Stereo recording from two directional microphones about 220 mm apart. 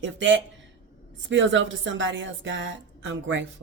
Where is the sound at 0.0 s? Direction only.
55° right (ahead or behind).